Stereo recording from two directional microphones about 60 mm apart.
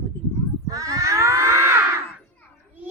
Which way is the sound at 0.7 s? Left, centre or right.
Right.